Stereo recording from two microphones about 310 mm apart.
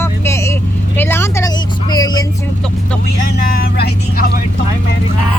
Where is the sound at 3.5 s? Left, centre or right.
Left.